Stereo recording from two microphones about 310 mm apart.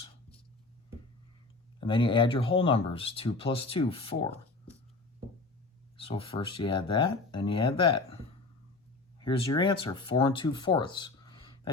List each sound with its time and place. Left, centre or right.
1.8 s speech: centre
6.0 s speech: centre
9.1 s speech: centre